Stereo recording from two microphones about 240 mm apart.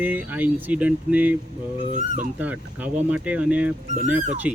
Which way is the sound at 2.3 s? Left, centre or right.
Centre.